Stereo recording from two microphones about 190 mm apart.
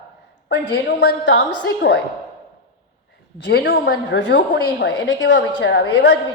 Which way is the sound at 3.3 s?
65° left (ahead or behind).